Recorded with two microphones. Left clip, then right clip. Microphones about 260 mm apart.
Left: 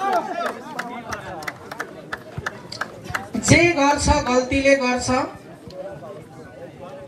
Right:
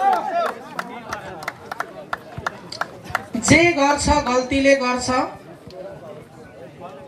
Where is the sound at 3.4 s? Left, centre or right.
Right.